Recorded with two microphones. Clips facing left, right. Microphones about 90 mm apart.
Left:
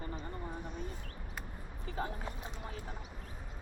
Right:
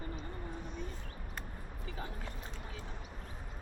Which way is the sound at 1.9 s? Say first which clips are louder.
Left 6 dB; 40° left (ahead or behind).